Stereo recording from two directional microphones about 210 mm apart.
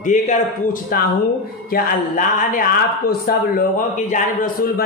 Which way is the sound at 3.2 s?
40° left (ahead or behind).